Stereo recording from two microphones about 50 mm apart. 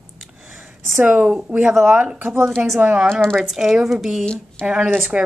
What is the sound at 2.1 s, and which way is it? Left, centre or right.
Speech, right.